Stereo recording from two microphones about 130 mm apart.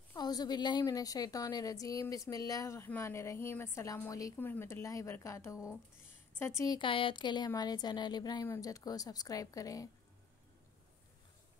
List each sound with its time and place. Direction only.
0.1 s a woman's voice: 30° left (ahead or behind)
6.8 s a woman's voice: 40° left (ahead or behind)